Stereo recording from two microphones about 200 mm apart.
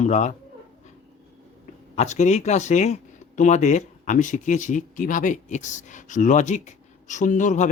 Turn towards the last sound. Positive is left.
turn(degrees=40)  # may be behind; listen again after turning